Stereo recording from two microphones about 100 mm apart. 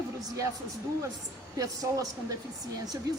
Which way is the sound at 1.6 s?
35° right (ahead or behind).